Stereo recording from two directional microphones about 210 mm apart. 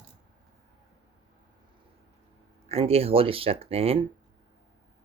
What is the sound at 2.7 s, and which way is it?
Speech, 30° right (ahead or behind).